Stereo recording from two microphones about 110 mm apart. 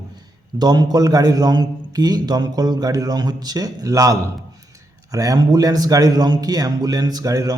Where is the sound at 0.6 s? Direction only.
40° right (ahead or behind).